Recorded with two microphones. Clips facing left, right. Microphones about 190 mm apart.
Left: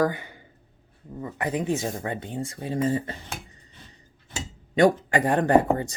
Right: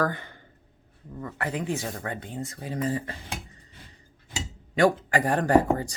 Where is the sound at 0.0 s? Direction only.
10° left (ahead or behind).